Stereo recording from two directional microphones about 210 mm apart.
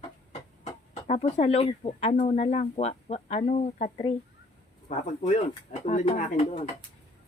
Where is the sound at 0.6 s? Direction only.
30° left (ahead or behind).